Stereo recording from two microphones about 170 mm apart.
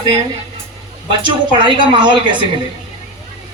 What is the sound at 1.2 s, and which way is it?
Speech, 30° right (ahead or behind).